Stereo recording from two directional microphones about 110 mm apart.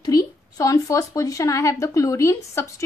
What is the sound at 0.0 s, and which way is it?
A woman's voice, 35° left (ahead or behind).